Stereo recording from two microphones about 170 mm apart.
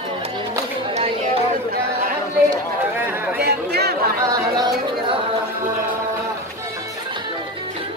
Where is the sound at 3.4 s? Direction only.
70° right (ahead or behind).